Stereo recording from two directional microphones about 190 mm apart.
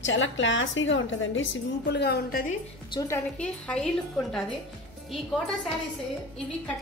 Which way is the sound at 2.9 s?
20° left (ahead or behind).